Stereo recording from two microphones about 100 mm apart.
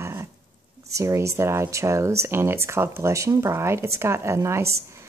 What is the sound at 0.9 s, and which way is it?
Speech, 30° right (ahead or behind).